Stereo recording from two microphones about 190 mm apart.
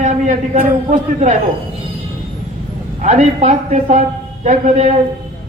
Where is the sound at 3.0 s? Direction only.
40° right (ahead or behind).